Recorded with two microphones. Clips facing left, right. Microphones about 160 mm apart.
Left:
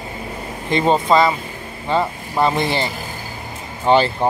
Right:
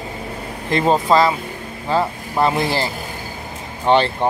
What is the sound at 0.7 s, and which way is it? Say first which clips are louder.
Speech: even; centre (ahead or behind).